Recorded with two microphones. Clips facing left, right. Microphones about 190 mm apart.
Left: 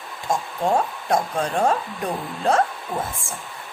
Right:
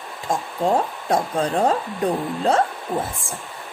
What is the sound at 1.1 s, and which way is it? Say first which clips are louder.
Speech: right 3 dB; 30° right (ahead or behind).